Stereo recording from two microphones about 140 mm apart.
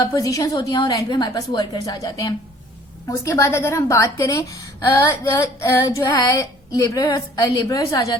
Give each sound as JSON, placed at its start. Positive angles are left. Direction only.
{"t": 0.0, "sound": "a woman's voice", "side_deg": 25}